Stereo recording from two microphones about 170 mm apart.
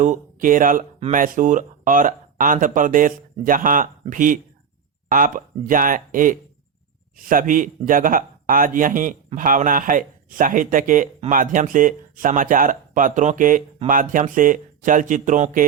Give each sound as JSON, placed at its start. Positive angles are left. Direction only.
{"t": 0.0, "sound": "speech", "side_deg": -50}